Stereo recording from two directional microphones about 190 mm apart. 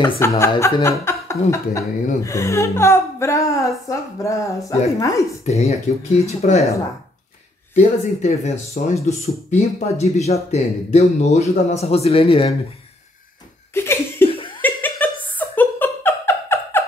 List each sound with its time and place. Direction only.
0.2 s speech: 15° left (ahead or behind)
5.5 s speech: 35° left (ahead or behind)
7.7 s speech: 35° left (ahead or behind)
13.7 s laughter: 10° left (ahead or behind)
14.6 s a sound: 10° left (ahead or behind)